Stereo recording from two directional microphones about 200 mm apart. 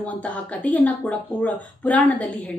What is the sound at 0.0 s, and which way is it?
Speech, 5° left (ahead or behind).